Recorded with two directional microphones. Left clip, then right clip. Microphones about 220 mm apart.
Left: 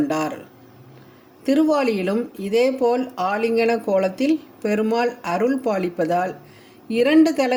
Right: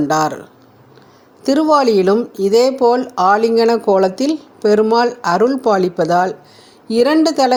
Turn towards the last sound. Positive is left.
turn(degrees=-25)  # may be behind; listen again after turning